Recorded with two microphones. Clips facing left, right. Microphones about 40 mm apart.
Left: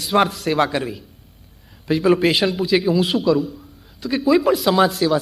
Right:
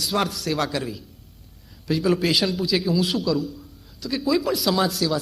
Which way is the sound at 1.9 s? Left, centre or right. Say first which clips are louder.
Left 5 dB; left.